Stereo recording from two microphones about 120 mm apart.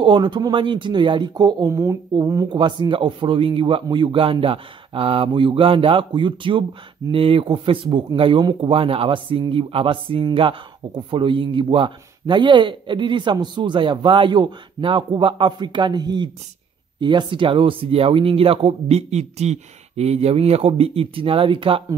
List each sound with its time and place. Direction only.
0.0 s a man's voice: 40° right (ahead or behind)
1.7 s a man's voice: 25° right (ahead or behind); by 21.8 s 45° right (ahead or behind)